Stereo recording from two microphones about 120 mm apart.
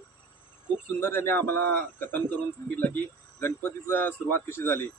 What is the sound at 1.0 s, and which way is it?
Speech, 20° left (ahead or behind).